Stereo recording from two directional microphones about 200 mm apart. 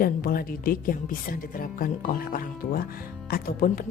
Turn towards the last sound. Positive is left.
turn(degrees=45)  # may be behind; listen again after turning